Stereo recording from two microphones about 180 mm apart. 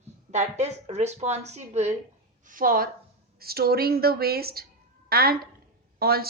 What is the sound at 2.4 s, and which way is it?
A woman's voice, 50° right (ahead or behind).